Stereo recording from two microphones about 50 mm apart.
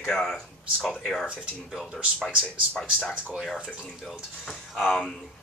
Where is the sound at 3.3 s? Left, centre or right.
Centre.